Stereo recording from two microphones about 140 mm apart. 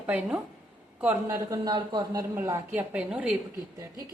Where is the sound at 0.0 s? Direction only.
10° right (ahead or behind).